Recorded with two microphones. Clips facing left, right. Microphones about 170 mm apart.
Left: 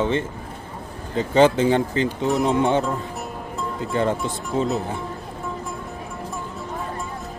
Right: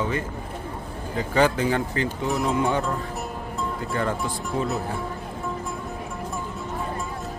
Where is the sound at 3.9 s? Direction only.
20° left (ahead or behind).